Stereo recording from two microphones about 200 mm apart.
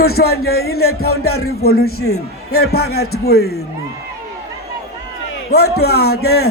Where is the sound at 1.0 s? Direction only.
90° left.